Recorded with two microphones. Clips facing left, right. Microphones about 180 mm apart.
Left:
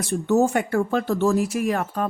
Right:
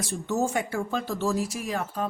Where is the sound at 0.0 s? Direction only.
60° left (ahead or behind).